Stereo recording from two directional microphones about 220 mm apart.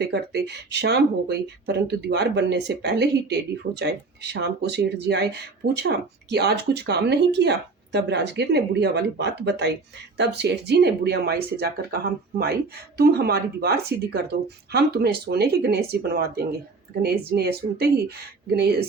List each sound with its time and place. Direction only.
0.0 s speech: 50° right (ahead or behind)
13.0 s speech: 45° right (ahead or behind)